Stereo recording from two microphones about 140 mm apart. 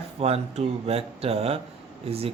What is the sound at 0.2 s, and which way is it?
A man's voice, 45° right (ahead or behind).